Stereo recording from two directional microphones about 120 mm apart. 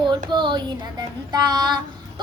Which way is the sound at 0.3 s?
40° right (ahead or behind).